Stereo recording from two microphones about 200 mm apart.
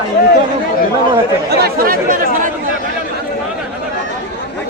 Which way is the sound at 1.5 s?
50° right (ahead or behind).